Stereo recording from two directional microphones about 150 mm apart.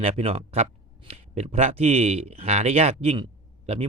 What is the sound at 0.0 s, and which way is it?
Speech, 45° right (ahead or behind).